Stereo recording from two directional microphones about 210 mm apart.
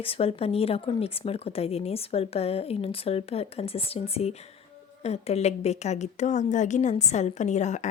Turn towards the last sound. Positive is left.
turn(degrees=35)  # may be behind; listen again after turning